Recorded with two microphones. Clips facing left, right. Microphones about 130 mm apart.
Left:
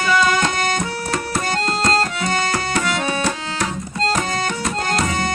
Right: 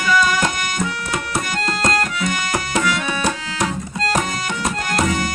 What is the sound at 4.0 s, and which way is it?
Music, 30° left (ahead or behind).